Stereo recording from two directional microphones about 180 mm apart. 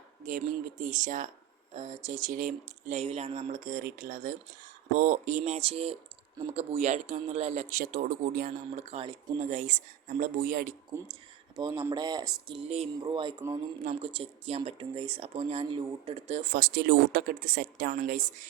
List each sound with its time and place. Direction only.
0.2 s speech: 45° right (ahead or behind)
8.4 s speech: 40° right (ahead or behind)
11.1 s a sound: 25° right (ahead or behind)
11.9 s speech: 25° right (ahead or behind); by 16.5 s 40° right (ahead or behind)
16.5 s speech: 65° right (ahead or behind); by 18.4 s 50° right (ahead or behind)